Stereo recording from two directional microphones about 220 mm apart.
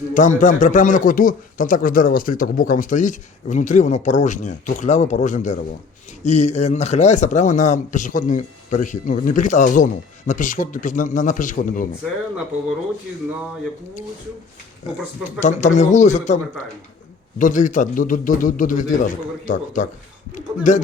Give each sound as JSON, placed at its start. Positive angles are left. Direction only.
{"t": 0.1, "sound": "speech", "side_deg": 35}
{"t": 15.4, "sound": "speech", "side_deg": 35}